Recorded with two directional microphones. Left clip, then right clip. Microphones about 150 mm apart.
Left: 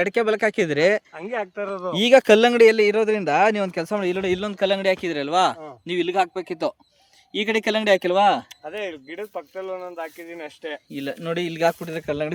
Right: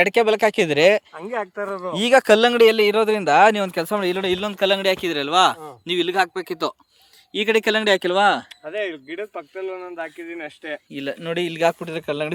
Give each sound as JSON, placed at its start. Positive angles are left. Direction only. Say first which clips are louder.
{"t": 0.0, "sound": "speech", "louder": "right 4 dB", "side_deg": 0}
{"t": 1.1, "sound": "speech", "louder": "right 1 dB", "side_deg": -25}
{"t": 2.0, "sound": "speech", "louder": "even", "side_deg": 35}
{"t": 8.6, "sound": "speech", "louder": "right 4 dB", "side_deg": 45}
{"t": 10.9, "sound": "speech", "louder": "right 2 dB", "side_deg": 20}